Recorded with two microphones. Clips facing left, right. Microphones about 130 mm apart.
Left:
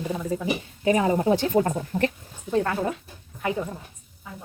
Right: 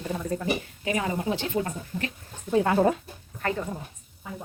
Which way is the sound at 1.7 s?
55° left (ahead or behind).